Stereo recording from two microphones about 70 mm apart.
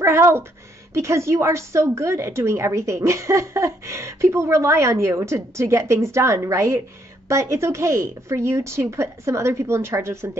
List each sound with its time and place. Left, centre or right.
0.0 s a woman's voice: right